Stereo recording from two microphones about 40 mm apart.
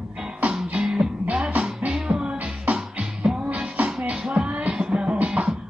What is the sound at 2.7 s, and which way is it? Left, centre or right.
Music, right.